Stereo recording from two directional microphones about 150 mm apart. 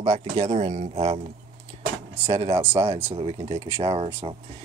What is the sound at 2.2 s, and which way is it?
Speech, 40° right (ahead or behind).